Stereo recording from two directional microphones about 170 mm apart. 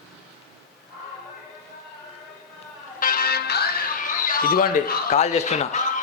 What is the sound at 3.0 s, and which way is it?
Music, 55° left (ahead or behind).